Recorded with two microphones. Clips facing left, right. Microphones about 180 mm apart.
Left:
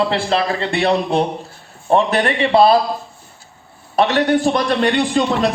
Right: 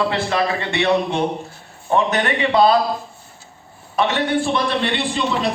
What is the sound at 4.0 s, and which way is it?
A man's voice, 35° left (ahead or behind).